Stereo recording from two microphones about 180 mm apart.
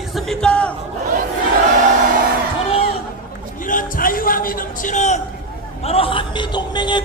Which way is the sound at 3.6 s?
50° left (ahead or behind).